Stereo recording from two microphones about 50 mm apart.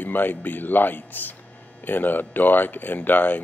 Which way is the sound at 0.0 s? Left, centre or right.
Left.